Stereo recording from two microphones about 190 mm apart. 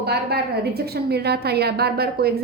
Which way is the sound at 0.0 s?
55° right (ahead or behind).